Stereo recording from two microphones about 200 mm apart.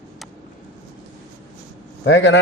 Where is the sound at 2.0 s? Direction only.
60° left (ahead or behind).